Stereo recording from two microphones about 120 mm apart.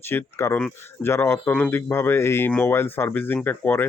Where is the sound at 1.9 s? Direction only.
20° left (ahead or behind).